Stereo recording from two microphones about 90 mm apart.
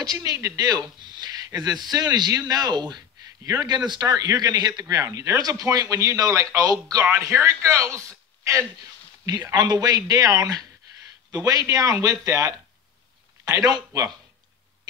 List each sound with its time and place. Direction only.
0.0 s a man's voice: 45° right (ahead or behind)
7.2 s speech: 30° right (ahead or behind)
9.5 s a man's voice: 50° right (ahead or behind)